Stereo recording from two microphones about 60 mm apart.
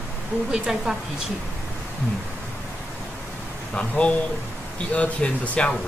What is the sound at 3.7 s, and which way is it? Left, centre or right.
Speech, left.